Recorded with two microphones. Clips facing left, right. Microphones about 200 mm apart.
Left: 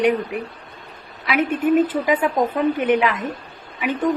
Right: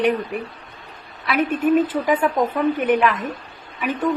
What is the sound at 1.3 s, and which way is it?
A woman's voice, 15° left (ahead or behind).